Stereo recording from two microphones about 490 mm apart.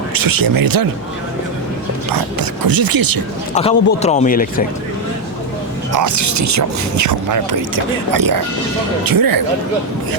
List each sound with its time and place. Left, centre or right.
0.1 s speech: right
2.0 s speech: right
3.5 s a man's voice: centre
5.9 s speech: right